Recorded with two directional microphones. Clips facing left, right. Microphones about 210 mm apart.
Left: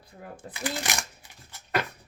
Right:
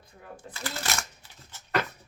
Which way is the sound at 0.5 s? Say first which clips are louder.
Left 3 dB; 15° left (ahead or behind).